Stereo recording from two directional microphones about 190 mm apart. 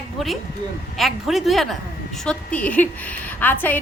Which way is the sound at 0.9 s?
Centre (ahead or behind).